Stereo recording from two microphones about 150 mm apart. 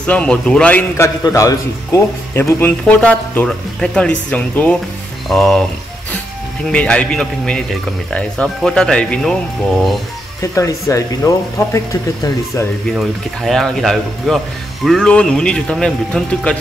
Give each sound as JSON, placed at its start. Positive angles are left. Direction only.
{"t": 0.0, "sound": "a man's voice", "side_deg": 5}
{"t": 6.7, "sound": "speech", "side_deg": 5}
{"t": 10.4, "sound": "speech", "side_deg": 20}
{"t": 12.9, "sound": "speech", "side_deg": 0}